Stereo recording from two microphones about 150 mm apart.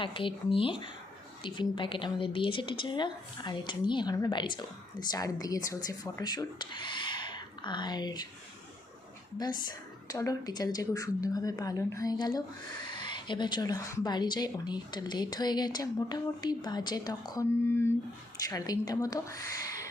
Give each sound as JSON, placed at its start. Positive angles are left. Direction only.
{"t": 0.0, "sound": "a woman's voice", "side_deg": 35}
{"t": 9.4, "sound": "a woman's voice", "side_deg": 25}